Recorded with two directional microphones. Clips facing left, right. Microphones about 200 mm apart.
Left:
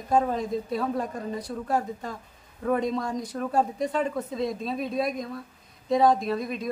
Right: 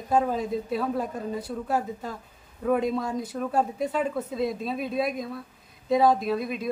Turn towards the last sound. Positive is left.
turn(degrees=-5)  # may be behind; listen again after turning